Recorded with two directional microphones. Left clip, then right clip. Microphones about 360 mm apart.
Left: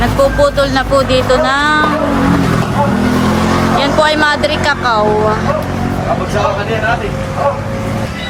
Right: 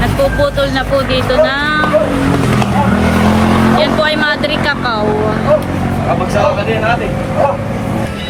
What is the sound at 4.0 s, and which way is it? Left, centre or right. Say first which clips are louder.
Speech: left 2 dB; centre.